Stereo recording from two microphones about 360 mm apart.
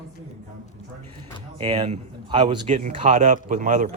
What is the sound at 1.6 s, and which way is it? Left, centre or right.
Speech, centre.